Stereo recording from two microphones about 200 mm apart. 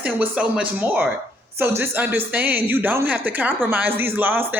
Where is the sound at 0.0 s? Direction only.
5° right (ahead or behind).